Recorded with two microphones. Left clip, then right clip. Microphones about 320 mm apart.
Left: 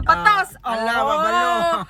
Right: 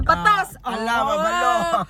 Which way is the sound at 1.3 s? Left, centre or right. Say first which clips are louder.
Left 1 dB; centre.